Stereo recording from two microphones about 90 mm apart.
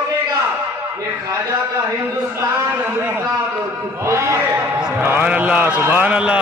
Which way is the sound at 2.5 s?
30° right (ahead or behind).